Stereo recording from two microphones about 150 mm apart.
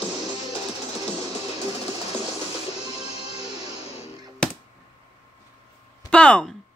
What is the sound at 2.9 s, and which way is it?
Music, 40° left (ahead or behind).